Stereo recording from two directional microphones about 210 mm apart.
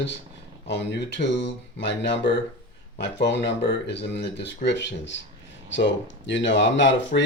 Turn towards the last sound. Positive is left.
turn(degrees=60)  # may be behind; listen again after turning